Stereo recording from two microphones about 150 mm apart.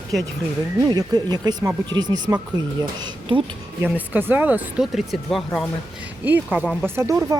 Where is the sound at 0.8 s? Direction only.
25° right (ahead or behind).